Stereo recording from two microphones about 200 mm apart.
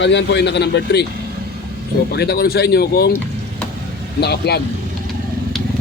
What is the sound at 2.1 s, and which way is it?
Speech, 55° left (ahead or behind).